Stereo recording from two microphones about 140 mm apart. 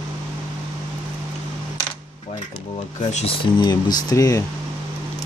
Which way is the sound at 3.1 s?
45° left (ahead or behind).